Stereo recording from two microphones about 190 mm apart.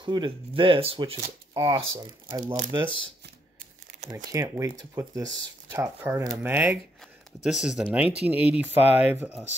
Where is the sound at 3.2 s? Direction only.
60° right (ahead or behind).